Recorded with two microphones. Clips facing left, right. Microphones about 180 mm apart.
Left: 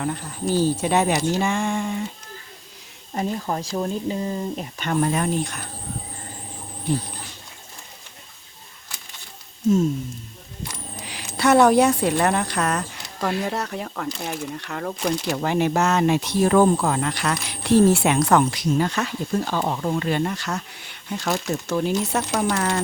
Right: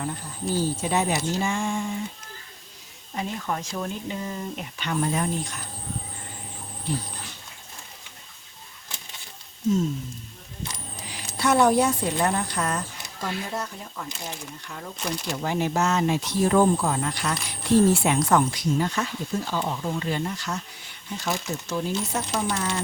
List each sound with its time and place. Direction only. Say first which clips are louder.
0.6 s speech: left 5 dB; 70° left (ahead or behind)
3.2 s speech: left 4 dB; 35° left (ahead or behind)
4.9 s speech: left 4 dB; 65° left (ahead or behind)
11.3 s speech: left 4 dB; 75° left (ahead or behind)